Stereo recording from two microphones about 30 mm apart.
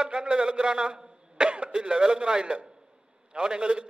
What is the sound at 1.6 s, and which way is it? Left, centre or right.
A man's voice, right.